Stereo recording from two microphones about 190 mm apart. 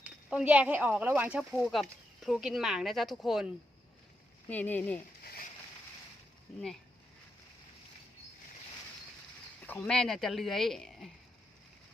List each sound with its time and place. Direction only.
0.0 s speech: 5° right (ahead or behind)
1.5 s speech: 5° left (ahead or behind)
4.4 s speech: 10° left (ahead or behind)
5.2 s a sound: 55° left (ahead or behind)
9.6 s speech: 5° left (ahead or behind)